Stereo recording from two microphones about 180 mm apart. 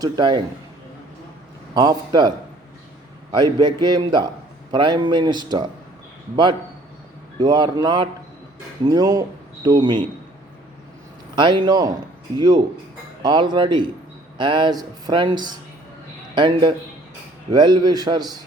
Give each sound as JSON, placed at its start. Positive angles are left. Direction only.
{"t": 0.0, "sound": "speech", "side_deg": -25}
{"t": 1.7, "sound": "speech", "side_deg": -20}
{"t": 3.3, "sound": "speech", "side_deg": -25}
{"t": 11.3, "sound": "speech", "side_deg": -25}